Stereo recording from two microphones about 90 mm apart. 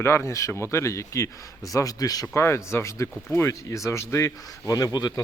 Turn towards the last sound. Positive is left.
turn(degrees=45)  # may be behind; listen again after turning